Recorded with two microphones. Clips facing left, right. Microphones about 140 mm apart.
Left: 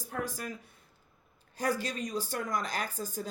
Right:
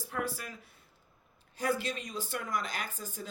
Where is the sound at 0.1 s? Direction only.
40° left (ahead or behind).